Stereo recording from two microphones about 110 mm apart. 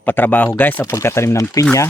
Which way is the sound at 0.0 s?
15° left (ahead or behind).